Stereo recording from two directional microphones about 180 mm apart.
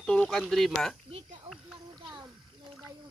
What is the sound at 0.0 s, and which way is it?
Speech, 5° left (ahead or behind).